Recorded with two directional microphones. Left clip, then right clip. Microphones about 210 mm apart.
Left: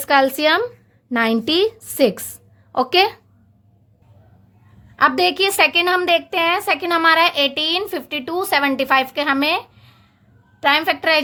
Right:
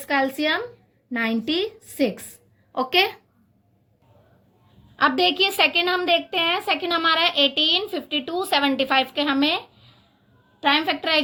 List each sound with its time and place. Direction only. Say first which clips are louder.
0.0 s a woman's voice: left 7 dB; 45° left (ahead or behind)
4.9 s a woman's voice: left 3 dB; 40° left (ahead or behind)